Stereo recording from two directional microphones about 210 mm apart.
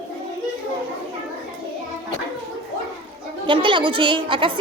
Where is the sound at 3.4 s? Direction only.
25° right (ahead or behind).